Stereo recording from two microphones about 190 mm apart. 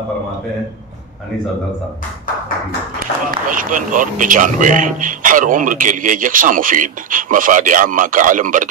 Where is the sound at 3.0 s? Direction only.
45° right (ahead or behind).